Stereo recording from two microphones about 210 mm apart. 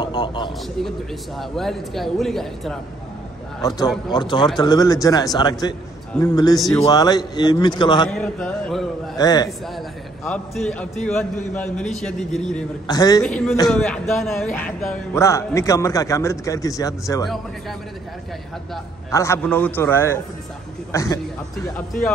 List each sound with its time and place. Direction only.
0.0 s a sound: 20° left (ahead or behind)
1.4 s speech: centre (ahead or behind)
3.6 s a man's voice: 20° left (ahead or behind)
8.1 s speech: 5° left (ahead or behind)
9.2 s a man's voice: 20° left (ahead or behind)
10.2 s speech: 5° left (ahead or behind)
12.8 s a man's voice: 20° left (ahead or behind)
13.2 s a man's voice: 5° left (ahead or behind)
17.2 s speech: centre (ahead or behind)
19.0 s a man's voice: 15° left (ahead or behind)